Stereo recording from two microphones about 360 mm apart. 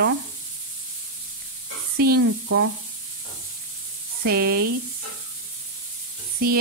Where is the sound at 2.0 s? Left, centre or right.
Right.